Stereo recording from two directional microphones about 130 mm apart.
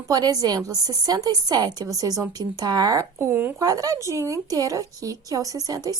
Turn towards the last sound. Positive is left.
turn(degrees=-30)  # may be behind; listen again after turning